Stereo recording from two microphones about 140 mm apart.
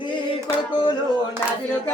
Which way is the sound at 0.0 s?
35° left (ahead or behind).